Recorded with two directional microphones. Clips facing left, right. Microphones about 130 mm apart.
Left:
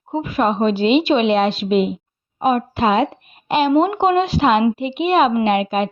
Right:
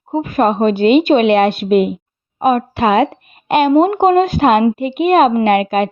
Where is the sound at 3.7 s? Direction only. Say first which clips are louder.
Right 4 dB; 45° right (ahead or behind).